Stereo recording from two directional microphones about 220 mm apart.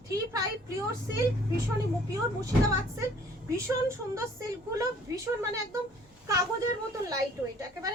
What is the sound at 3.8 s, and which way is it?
A woman's voice, 15° right (ahead or behind).